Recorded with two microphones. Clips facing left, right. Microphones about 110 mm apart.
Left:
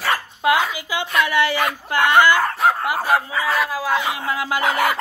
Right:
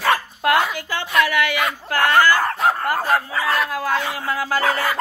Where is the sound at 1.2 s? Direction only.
30° left (ahead or behind).